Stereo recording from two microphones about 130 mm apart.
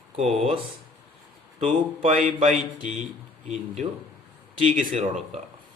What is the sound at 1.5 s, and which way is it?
Speech, 70° right (ahead or behind).